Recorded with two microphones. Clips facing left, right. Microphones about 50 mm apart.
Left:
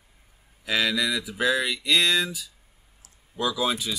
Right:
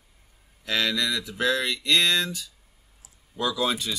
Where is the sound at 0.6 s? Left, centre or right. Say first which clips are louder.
Left 1 dB; centre.